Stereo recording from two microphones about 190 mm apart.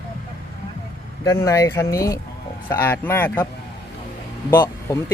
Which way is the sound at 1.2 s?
15° left (ahead or behind).